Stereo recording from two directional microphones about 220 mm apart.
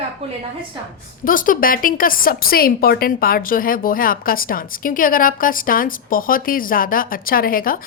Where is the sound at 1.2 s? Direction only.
40° left (ahead or behind).